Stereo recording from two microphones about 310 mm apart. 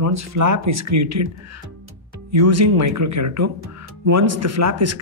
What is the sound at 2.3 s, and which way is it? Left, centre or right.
Speech, right.